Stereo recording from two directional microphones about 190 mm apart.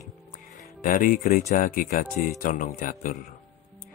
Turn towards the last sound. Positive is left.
turn(degrees=45)  # may be behind; listen again after turning